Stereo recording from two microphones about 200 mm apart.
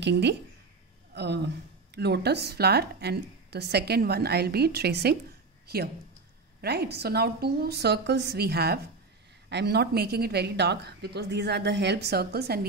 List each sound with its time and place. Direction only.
0.0 s a woman's voice: 60° right (ahead or behind)
6.6 s a woman's voice: 55° right (ahead or behind)